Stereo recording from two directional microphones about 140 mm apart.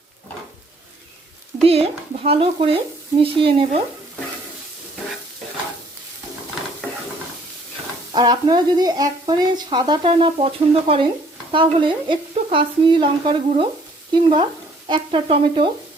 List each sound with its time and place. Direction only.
1.6 s speech: 45° right (ahead or behind)
8.1 s speech: 30° right (ahead or behind)